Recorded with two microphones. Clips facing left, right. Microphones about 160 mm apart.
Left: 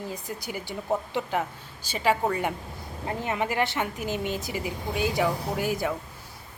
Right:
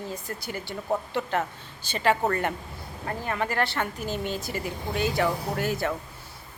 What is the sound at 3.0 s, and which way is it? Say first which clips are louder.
Speech: left 1 dB; 20° left (ahead or behind).